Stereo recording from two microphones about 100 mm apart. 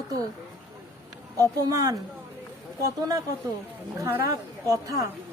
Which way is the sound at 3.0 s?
35° right (ahead or behind).